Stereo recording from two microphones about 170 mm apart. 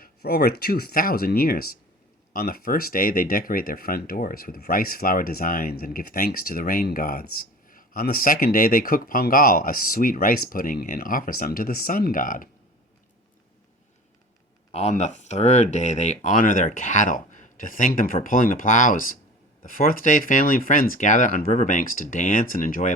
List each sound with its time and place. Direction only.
0.0 s speech: 65° left (ahead or behind)
14.7 s speech: 40° left (ahead or behind)